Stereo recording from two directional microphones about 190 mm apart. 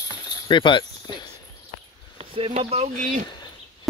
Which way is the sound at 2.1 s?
30° right (ahead or behind).